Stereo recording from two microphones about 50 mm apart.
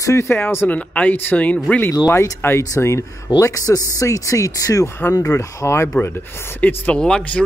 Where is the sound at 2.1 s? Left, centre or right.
Left.